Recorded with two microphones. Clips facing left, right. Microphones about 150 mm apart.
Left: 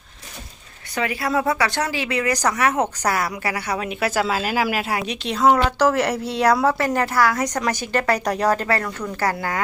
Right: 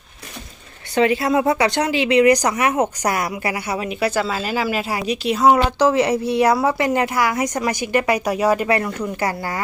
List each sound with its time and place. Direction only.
0.9 s speech: 25° right (ahead or behind); by 9.6 s 10° right (ahead or behind)